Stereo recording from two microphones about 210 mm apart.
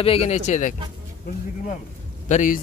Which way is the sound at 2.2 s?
35° left (ahead or behind).